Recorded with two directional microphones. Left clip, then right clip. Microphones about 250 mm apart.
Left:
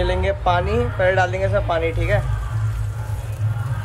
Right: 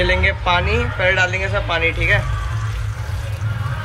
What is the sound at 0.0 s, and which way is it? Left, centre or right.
Speech, centre.